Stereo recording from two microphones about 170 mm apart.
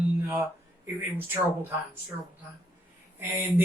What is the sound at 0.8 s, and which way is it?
Speech, 10° right (ahead or behind).